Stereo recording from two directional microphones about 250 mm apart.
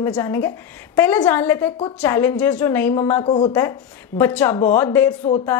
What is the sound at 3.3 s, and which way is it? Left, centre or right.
Speech, left.